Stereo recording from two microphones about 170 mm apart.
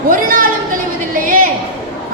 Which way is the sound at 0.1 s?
55° right (ahead or behind).